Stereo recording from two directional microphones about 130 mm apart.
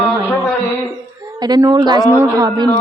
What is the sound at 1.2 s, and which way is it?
A woman's voice, 30° right (ahead or behind).